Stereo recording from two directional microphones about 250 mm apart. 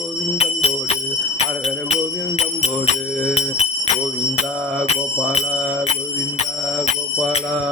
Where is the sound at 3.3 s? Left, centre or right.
Left.